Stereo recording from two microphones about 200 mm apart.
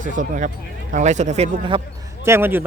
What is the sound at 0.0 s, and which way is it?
A man's voice, 40° right (ahead or behind).